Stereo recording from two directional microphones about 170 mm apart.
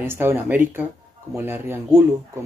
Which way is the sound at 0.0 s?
15° right (ahead or behind).